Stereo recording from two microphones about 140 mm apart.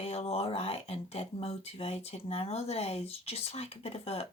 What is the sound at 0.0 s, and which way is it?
Speech, 45° left (ahead or behind).